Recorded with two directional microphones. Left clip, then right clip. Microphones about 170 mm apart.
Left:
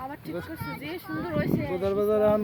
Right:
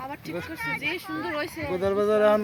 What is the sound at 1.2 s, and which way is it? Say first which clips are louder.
Speech: left 3 dB; 20° left (ahead or behind).